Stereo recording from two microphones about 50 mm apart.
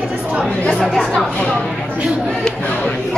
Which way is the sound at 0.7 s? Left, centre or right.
Centre.